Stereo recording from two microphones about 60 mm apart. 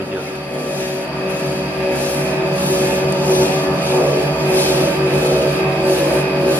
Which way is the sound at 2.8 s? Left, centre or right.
Left.